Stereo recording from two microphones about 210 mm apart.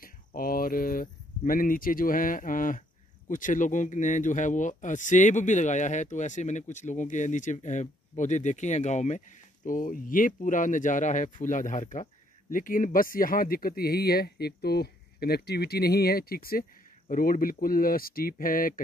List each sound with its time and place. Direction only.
0.0 s speech: 45° left (ahead or behind)